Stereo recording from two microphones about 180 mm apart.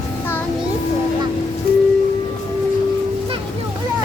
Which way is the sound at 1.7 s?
55° left (ahead or behind).